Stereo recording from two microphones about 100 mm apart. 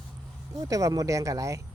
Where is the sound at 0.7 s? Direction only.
35° right (ahead or behind).